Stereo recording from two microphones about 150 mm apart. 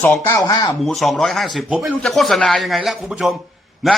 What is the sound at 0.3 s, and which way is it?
Speech, 25° left (ahead or behind).